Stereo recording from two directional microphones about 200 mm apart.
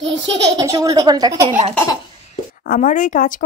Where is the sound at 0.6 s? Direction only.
15° right (ahead or behind).